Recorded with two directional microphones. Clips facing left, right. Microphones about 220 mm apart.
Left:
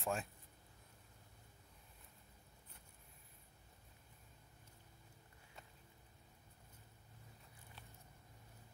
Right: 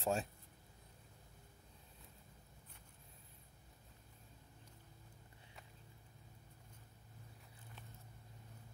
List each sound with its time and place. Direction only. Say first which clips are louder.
0.0 s speech: right 4 dB; 30° right (ahead or behind)